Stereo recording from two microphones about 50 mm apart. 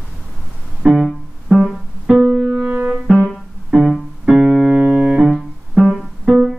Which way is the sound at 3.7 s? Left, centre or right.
Centre.